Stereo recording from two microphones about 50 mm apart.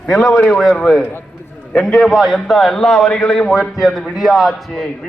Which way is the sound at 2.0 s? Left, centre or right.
Centre.